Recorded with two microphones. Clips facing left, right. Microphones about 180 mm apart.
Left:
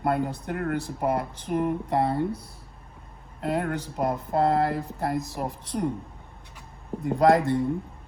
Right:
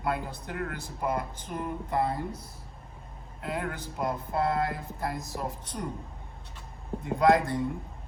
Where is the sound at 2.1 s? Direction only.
60° left (ahead or behind).